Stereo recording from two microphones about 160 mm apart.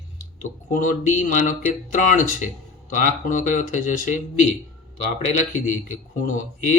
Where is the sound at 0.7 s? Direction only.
55° left (ahead or behind).